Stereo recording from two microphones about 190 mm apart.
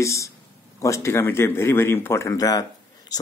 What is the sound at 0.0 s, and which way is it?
A man's voice, 15° left (ahead or behind).